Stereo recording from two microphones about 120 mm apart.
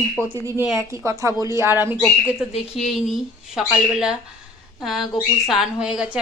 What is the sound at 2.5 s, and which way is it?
Speech, 55° left (ahead or behind).